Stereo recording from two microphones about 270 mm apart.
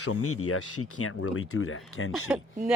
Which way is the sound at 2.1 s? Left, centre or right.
Centre.